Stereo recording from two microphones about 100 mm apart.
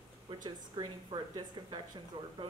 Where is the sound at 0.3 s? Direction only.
45° right (ahead or behind).